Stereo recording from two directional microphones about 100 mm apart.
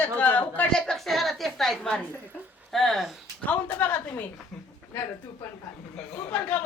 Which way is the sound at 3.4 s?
20° left (ahead or behind).